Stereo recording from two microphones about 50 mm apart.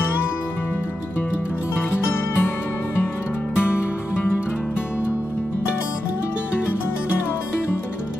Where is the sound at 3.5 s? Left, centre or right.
Left.